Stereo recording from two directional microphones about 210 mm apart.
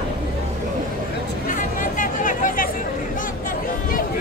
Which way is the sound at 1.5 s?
40° left (ahead or behind).